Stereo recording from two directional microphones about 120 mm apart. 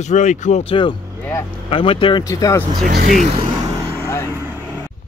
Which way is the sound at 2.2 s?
25° left (ahead or behind).